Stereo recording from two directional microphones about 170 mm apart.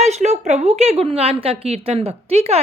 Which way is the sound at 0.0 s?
40° right (ahead or behind).